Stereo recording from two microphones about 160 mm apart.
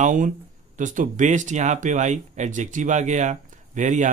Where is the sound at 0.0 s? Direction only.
55° right (ahead or behind).